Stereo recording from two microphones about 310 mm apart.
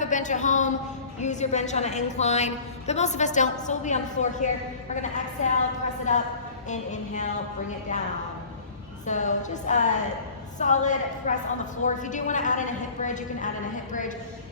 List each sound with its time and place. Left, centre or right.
0.0 s a sound: left
1.2 s a woman's voice: left
9.0 s a woman's voice: left